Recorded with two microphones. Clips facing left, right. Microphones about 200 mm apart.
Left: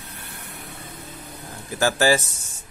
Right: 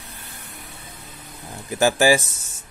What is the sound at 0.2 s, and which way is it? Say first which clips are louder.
Vehicle: left 2 dB; 60° left (ahead or behind).